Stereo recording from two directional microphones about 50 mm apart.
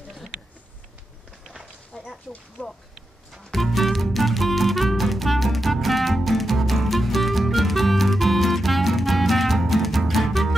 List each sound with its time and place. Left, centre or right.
1.4 s a sound: centre
2.6 s speech: left
3.5 s music: centre